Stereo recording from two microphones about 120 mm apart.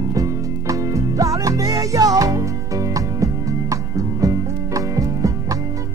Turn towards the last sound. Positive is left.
turn(degrees=-30)  # may be behind; listen again after turning